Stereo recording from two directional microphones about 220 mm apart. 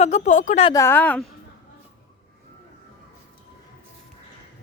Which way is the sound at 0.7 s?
10° left (ahead or behind).